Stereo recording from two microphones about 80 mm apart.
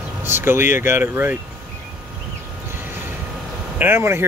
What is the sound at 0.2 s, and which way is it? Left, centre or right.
Speech, right.